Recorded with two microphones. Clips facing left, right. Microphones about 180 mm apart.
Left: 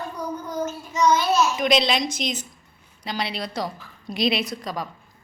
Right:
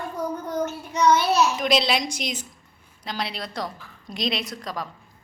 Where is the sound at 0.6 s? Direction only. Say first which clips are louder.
Even; 65° right (ahead or behind).